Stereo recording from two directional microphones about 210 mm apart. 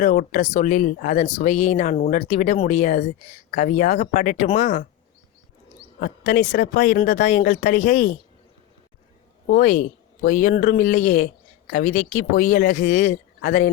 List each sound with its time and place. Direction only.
0.0 s speech: 40° left (ahead or behind)
6.0 s speech: 45° left (ahead or behind)
9.5 s speech: 40° left (ahead or behind)